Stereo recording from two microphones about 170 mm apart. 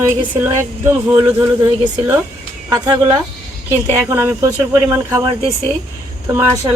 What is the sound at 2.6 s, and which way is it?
Speech, 25° right (ahead or behind).